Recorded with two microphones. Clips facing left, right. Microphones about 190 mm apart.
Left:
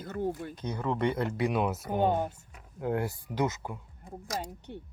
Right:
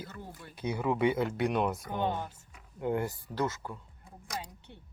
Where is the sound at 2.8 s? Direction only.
5° left (ahead or behind).